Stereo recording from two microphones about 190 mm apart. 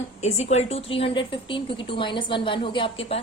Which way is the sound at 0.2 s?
35° left (ahead or behind).